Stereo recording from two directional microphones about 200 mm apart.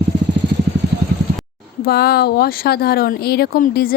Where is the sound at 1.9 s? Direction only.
55° left (ahead or behind).